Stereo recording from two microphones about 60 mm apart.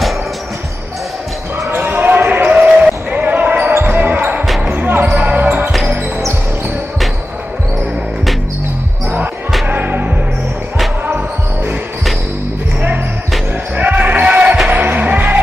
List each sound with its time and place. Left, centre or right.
1.7 s basketball bounce: right
9.7 s music: right
13.7 s basketball bounce: right